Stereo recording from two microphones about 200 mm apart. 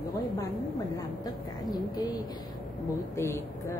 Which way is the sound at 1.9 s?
20° left (ahead or behind).